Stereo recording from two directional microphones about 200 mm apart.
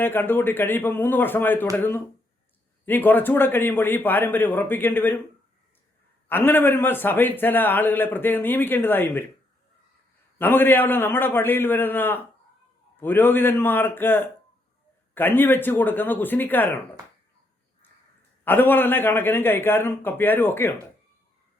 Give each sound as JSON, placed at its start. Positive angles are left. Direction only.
{"t": 0.0, "sound": "a man's voice", "side_deg": 10}
{"t": 6.2, "sound": "a man's voice", "side_deg": 10}
{"t": 10.3, "sound": "a man's voice", "side_deg": 10}
{"t": 18.4, "sound": "a man's voice", "side_deg": 10}